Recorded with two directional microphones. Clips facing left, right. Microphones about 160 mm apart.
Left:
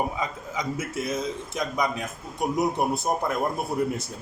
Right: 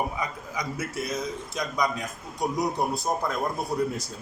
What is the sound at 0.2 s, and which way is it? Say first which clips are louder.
A man's voice: left 2 dB; 25° left (ahead or behind).